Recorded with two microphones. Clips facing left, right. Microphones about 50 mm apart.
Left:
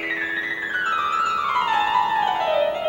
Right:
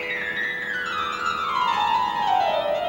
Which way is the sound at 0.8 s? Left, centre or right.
Left.